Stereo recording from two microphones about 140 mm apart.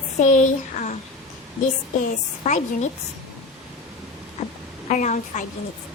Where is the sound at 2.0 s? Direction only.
60° left (ahead or behind).